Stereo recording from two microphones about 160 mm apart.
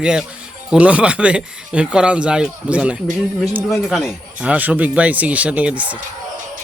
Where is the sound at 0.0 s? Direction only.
5° right (ahead or behind).